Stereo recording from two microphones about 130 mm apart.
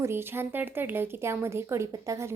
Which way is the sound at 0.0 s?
20° right (ahead or behind).